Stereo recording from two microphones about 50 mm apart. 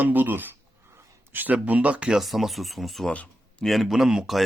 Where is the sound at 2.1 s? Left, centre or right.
Centre.